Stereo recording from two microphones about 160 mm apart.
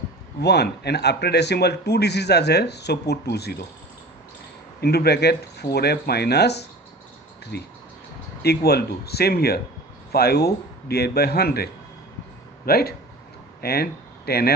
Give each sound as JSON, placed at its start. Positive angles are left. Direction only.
{"t": 0.4, "sound": "speech", "side_deg": 90}
{"t": 4.8, "sound": "speech", "side_deg": 90}